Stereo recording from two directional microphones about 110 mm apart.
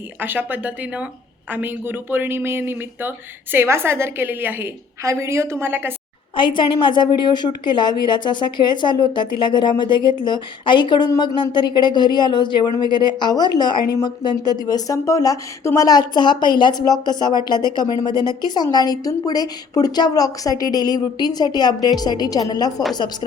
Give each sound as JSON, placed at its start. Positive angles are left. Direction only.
{"t": 0.2, "sound": "a woman's voice", "side_deg": -15}
{"t": 6.3, "sound": "a woman's voice", "side_deg": 45}